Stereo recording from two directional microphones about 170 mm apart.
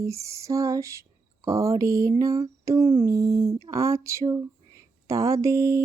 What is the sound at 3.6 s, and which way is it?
Speech, 20° right (ahead or behind).